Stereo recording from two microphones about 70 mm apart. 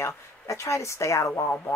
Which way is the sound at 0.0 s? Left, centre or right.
Left.